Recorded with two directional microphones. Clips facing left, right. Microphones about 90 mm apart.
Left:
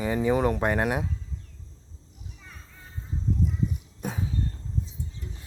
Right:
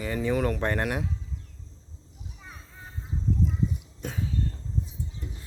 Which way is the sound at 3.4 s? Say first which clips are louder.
Even; 15° left (ahead or behind).